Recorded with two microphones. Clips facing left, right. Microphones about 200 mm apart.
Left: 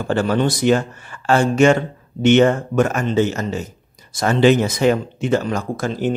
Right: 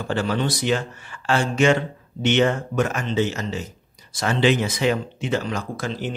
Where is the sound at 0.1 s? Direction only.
45° left (ahead or behind).